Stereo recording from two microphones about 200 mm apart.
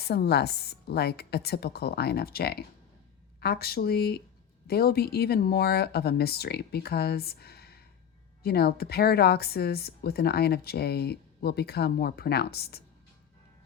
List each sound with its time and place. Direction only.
0.1 s speech: 55° left (ahead or behind)